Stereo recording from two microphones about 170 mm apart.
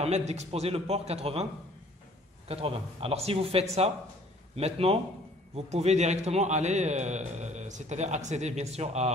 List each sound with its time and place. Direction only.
0.0 s a man's voice: 40° right (ahead or behind)